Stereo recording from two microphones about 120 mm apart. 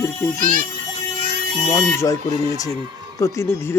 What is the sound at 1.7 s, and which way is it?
Speech, 25° left (ahead or behind).